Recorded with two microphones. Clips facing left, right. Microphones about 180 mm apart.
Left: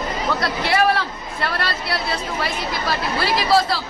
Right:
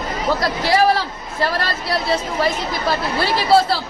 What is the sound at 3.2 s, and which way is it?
Speech, 30° right (ahead or behind).